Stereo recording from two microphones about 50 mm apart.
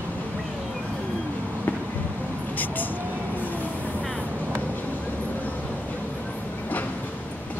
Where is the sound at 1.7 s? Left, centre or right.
Left.